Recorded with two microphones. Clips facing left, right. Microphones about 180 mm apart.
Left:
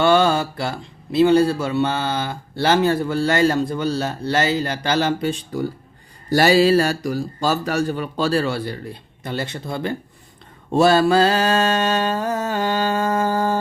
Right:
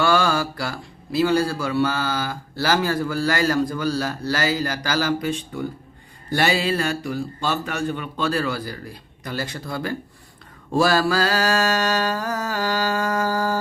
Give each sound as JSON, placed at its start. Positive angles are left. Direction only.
{"t": 0.0, "sound": "a man's voice", "side_deg": 25}